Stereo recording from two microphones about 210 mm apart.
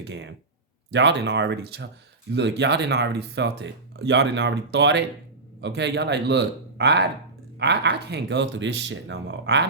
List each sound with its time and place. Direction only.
0.0 s speech: 55° right (ahead or behind)